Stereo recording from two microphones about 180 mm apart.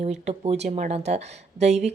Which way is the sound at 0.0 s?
35° right (ahead or behind).